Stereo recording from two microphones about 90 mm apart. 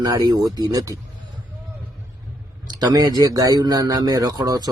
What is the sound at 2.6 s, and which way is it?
Speech, 50° right (ahead or behind).